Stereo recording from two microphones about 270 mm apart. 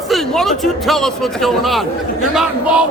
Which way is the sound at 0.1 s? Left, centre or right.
Centre.